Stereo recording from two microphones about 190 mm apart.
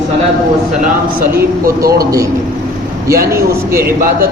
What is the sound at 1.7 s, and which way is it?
Speech, 50° right (ahead or behind).